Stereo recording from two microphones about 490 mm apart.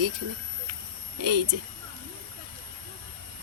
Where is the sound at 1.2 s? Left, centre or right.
Right.